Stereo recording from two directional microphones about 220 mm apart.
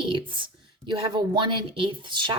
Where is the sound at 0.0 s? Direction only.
25° right (ahead or behind).